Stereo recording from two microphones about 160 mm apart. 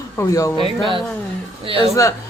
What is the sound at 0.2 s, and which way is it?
Speech, 20° left (ahead or behind).